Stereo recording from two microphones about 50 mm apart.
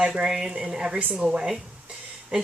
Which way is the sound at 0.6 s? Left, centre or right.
Centre.